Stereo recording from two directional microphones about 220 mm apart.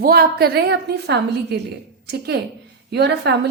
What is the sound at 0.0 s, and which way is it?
A woman's voice, 45° right (ahead or behind).